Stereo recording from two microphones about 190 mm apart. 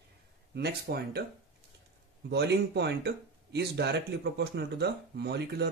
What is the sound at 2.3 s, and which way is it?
Speech, 60° right (ahead or behind).